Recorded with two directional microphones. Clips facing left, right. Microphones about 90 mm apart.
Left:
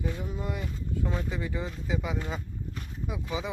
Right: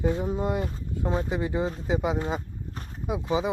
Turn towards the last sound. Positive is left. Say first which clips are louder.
# right 7 dB
turn(degrees=-25)  # may be behind; listen again after turning